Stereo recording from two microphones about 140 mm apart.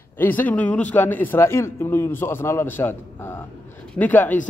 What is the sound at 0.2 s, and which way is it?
A man's voice, 10° left (ahead or behind).